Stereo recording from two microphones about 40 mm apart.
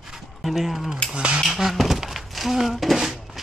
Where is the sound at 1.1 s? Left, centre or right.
Right.